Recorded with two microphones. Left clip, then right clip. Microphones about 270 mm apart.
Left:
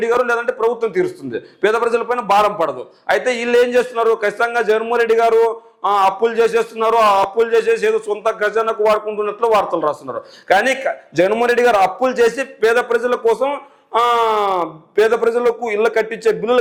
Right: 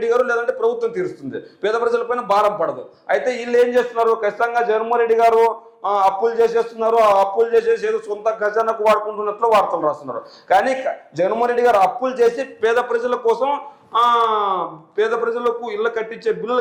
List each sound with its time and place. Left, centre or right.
0.0 s a man's voice: left